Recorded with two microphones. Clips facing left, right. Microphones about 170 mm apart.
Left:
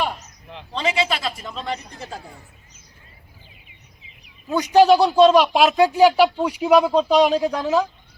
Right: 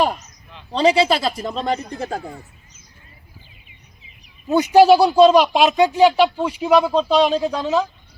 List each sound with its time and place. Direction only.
0.2 s a sound: 65° left (ahead or behind)
0.7 s a man's voice: 35° right (ahead or behind); by 2.3 s 60° right (ahead or behind)
4.7 s speech: 10° right (ahead or behind)